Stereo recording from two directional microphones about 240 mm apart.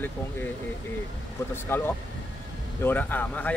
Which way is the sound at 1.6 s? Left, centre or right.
Centre.